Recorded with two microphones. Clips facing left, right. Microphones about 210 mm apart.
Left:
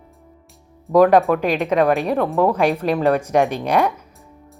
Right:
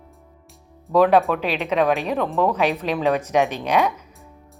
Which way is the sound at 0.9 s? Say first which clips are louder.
Left 3 dB; 10° left (ahead or behind).